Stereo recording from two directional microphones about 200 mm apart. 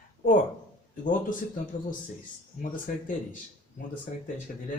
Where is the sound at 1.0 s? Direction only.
40° left (ahead or behind).